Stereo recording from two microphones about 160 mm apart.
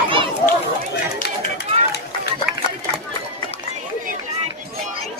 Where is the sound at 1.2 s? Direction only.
90° left.